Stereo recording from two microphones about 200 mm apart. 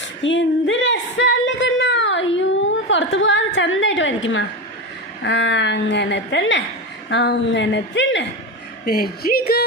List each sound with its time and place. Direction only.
0.2 s singing: 70° left (ahead or behind)
5.2 s a woman's voice: 65° left (ahead or behind)
8.9 s speech: 50° left (ahead or behind)